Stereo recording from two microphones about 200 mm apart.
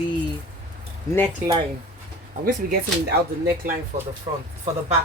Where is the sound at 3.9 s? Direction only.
35° right (ahead or behind).